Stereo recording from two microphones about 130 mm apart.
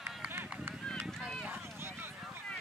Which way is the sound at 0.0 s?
15° right (ahead or behind).